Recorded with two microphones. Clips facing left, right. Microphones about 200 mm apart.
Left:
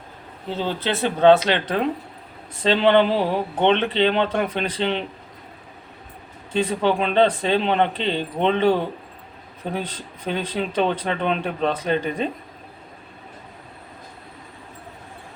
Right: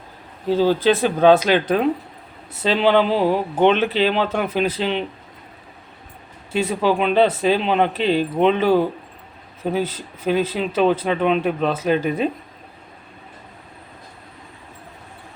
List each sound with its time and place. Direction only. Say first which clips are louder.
0.8 s speech: right 4 dB; 10° right (ahead or behind)
6.5 s speech: right 1 dB; 10° right (ahead or behind)